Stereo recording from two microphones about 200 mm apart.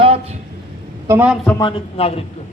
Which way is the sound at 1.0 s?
10° right (ahead or behind).